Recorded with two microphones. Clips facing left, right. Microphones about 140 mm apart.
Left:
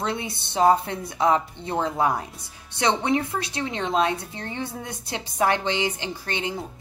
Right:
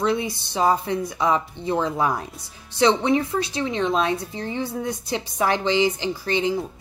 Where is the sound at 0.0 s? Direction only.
25° left (ahead or behind).